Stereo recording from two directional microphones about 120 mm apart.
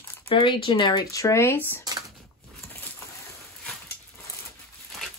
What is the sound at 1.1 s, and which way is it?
Speech, 25° left (ahead or behind).